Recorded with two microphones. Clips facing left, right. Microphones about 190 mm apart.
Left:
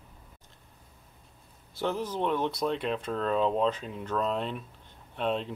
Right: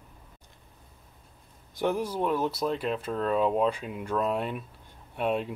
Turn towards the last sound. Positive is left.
turn(degrees=-10)  # may be behind; listen again after turning